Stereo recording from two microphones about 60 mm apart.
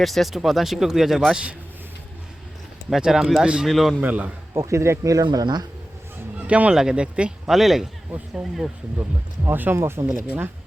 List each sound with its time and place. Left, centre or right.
0.0 s speech: centre
2.9 s speech: centre
3.7 s speech: centre
4.0 s a man's voice: right
4.5 s speech: right
5.0 s speech: right
6.5 s a man's voice: right; by 8.7 s centre
9.5 s speech: right
9.7 s speech: right